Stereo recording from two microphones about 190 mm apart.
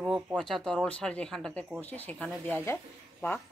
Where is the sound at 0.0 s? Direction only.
5° right (ahead or behind).